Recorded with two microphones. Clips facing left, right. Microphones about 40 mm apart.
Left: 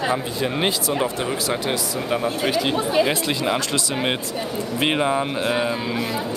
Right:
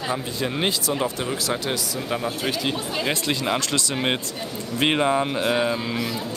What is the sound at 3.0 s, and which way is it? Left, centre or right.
Speech, centre.